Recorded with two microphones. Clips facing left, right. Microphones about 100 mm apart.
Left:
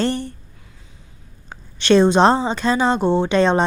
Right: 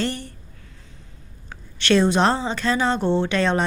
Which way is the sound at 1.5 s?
20° left (ahead or behind).